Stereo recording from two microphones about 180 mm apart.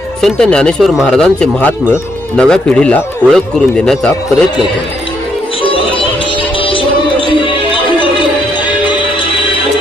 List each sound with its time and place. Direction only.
0.2 s speech: 5° left (ahead or behind)
5.6 s music: 30° left (ahead or behind)